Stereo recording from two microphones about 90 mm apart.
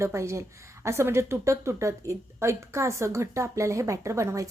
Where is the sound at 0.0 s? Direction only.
30° right (ahead or behind).